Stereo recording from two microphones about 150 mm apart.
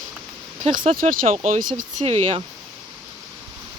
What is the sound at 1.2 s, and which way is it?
Speech, 55° right (ahead or behind).